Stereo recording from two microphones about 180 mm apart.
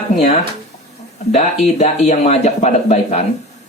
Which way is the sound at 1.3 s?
40° left (ahead or behind).